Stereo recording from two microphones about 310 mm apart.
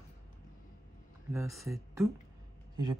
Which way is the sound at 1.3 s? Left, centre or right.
Centre.